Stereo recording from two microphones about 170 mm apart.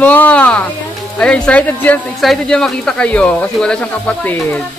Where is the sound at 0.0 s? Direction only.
10° left (ahead or behind).